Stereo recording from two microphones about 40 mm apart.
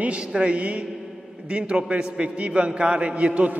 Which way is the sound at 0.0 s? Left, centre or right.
Right.